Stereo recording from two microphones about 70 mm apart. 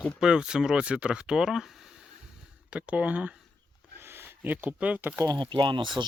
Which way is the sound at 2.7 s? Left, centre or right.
Centre.